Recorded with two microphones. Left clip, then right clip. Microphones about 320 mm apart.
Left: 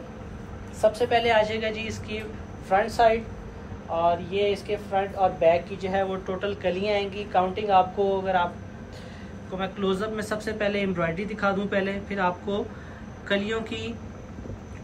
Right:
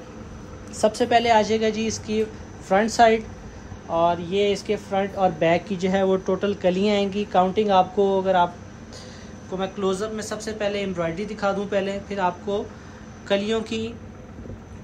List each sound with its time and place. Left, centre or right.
0.7 s speech: right
9.6 s a man's voice: centre